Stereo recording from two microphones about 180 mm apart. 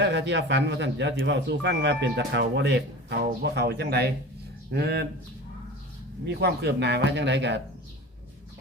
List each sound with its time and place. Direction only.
0.0 s speech: 75° right (ahead or behind)
6.4 s speech: 65° right (ahead or behind)